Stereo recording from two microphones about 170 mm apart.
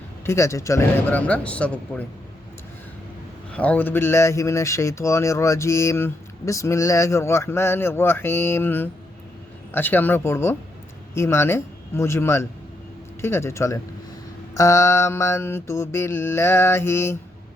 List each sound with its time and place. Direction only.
0.3 s speech: 15° left (ahead or behind)
3.5 s speech: 10° left (ahead or behind)